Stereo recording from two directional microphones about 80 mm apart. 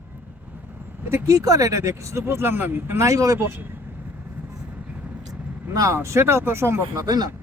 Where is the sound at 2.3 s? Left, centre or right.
Right.